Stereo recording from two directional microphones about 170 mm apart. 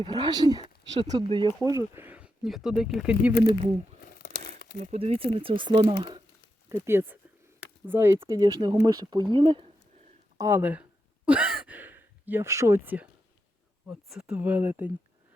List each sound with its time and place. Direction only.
0.0 s speech: 25° right (ahead or behind); by 3.3 s 5° right (ahead or behind)
4.2 s crumpling: 75° left (ahead or behind)
4.8 s speech: 35° right (ahead or behind)
6.7 s speech: 15° right (ahead or behind); by 9.6 s 30° right (ahead or behind)
10.3 s speech: 15° right (ahead or behind)
11.3 s sigh: 10° right (ahead or behind)
13.8 s speech: centre (ahead or behind)